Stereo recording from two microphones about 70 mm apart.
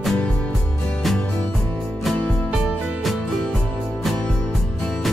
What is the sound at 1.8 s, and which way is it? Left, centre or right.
Music, centre.